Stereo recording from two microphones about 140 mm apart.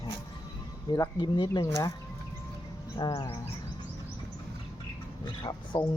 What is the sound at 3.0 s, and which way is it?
Speech, 35° left (ahead or behind).